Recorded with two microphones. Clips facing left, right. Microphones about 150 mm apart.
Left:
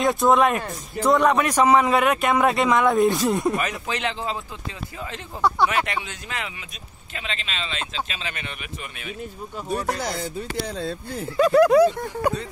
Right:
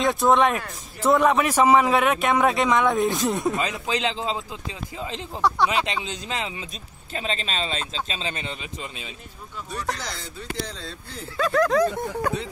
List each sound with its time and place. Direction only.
0.0 s a man's voice: centre (ahead or behind)
3.5 s speech: 20° right (ahead or behind)
9.9 s speech: 55° left (ahead or behind)
11.3 s speech: 15° left (ahead or behind)